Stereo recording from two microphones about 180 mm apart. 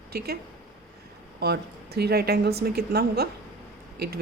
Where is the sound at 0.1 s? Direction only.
60° right (ahead or behind).